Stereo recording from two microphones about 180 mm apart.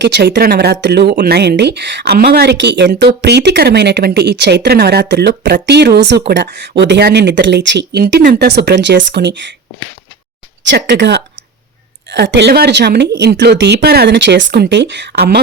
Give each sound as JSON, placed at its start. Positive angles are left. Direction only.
{"t": 0.0, "sound": "speech", "side_deg": -65}
{"t": 10.7, "sound": "speech", "side_deg": -75}